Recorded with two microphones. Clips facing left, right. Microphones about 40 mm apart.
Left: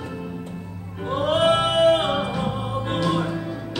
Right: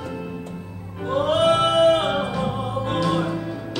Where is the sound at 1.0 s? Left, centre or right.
Centre.